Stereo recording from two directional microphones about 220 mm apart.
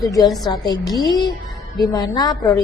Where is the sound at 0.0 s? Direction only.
15° left (ahead or behind).